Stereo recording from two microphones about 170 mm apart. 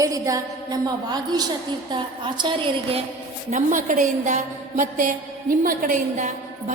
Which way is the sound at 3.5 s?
50° right (ahead or behind).